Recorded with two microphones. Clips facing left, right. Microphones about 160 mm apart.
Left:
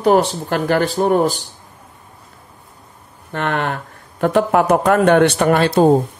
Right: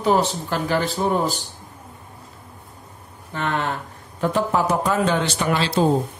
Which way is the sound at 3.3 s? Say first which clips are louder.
Left 4 dB; 65° left (ahead or behind).